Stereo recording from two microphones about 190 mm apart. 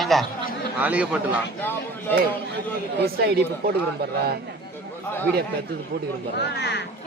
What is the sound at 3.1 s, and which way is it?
Speech, 55° right (ahead or behind).